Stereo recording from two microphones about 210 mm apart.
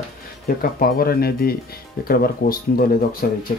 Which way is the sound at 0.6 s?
45° left (ahead or behind).